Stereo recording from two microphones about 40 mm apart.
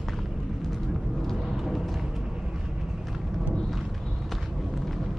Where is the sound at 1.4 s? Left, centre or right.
Centre.